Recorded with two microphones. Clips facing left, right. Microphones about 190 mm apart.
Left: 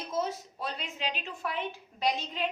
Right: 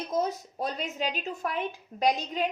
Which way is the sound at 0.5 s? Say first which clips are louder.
Right 6 dB; 45° right (ahead or behind).